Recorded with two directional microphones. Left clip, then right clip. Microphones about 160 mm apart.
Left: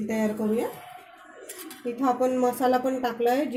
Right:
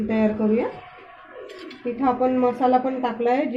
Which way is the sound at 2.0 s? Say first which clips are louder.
Right 3 dB; 55° left (ahead or behind).